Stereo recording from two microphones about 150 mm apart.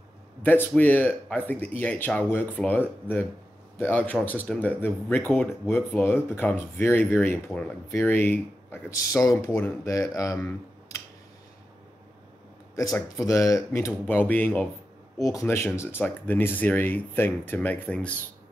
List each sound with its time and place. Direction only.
0.4 s speech: 10° left (ahead or behind)
12.7 s speech: 25° left (ahead or behind)